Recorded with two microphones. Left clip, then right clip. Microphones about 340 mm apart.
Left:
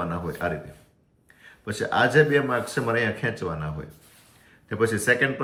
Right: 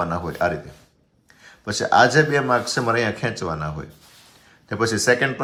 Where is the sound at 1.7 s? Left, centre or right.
Centre.